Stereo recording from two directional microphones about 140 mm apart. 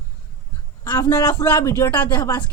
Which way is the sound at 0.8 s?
20° left (ahead or behind).